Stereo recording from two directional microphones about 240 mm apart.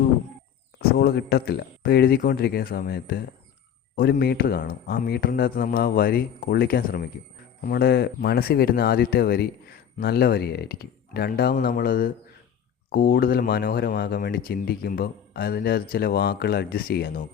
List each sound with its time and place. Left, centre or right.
0.8 s speech: left